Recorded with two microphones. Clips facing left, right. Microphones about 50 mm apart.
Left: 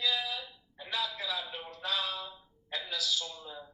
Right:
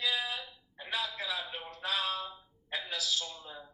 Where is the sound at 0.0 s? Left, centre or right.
Centre.